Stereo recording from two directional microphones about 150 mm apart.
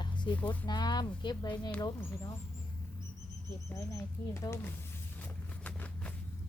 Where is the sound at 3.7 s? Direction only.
20° left (ahead or behind).